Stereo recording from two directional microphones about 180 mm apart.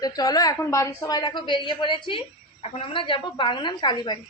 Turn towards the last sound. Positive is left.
turn(degrees=25)  # may be behind; listen again after turning